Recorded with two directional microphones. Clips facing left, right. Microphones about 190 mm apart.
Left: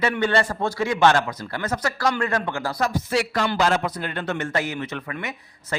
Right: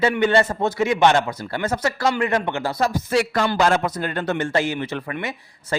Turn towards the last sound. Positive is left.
turn(degrees=-30)  # may be behind; listen again after turning